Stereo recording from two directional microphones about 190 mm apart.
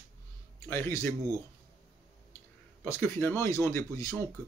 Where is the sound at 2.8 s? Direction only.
15° left (ahead or behind).